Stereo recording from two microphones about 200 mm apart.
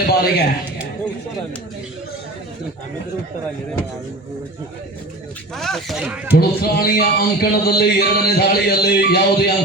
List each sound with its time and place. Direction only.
0.0 s a man's voice: 50° left (ahead or behind)
5.5 s speech: centre (ahead or behind)
6.3 s speech: 50° left (ahead or behind)